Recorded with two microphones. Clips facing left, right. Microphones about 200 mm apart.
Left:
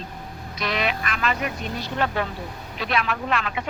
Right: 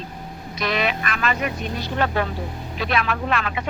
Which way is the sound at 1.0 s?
55° right (ahead or behind).